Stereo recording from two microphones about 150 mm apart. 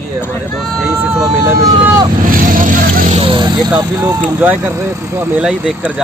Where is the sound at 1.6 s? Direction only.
25° right (ahead or behind).